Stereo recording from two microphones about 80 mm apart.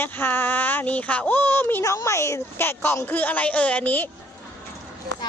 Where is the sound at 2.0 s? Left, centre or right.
Left.